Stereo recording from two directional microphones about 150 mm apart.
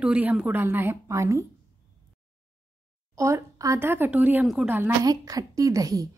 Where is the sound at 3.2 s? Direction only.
20° right (ahead or behind).